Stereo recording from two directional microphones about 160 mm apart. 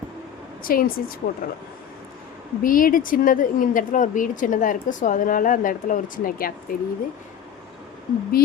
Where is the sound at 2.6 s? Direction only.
60° left (ahead or behind).